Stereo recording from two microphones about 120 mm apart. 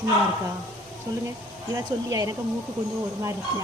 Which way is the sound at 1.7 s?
30° right (ahead or behind).